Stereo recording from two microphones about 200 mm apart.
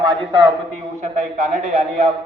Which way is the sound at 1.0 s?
40° right (ahead or behind).